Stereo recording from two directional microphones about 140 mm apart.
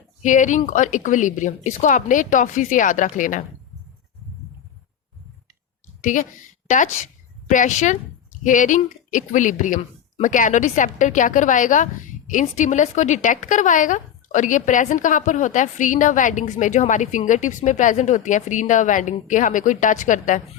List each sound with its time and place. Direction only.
0.2 s a woman's voice: 65° left (ahead or behind)
6.0 s a woman's voice: 65° left (ahead or behind)